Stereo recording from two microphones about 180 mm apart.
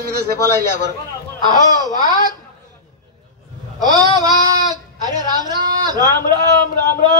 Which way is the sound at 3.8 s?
20° right (ahead or behind).